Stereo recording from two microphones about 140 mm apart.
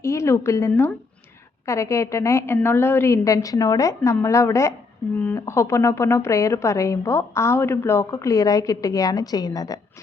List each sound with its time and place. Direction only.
0.0 s a woman's voice: 20° left (ahead or behind)
0.7 s speech: 10° left (ahead or behind)
1.6 s a woman's voice: 20° left (ahead or behind)